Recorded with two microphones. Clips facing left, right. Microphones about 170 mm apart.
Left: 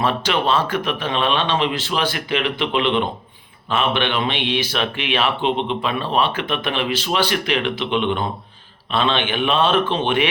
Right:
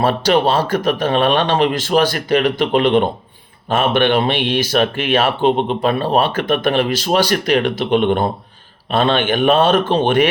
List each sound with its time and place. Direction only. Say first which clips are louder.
0.0 s speech: right 6 dB; 40° right (ahead or behind)